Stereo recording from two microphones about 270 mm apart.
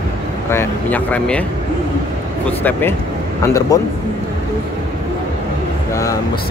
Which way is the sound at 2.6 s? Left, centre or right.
Centre.